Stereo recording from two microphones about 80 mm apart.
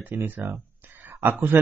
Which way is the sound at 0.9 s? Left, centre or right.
Right.